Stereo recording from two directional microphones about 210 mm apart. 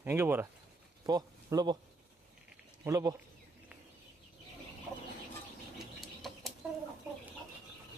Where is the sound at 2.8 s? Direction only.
15° right (ahead or behind).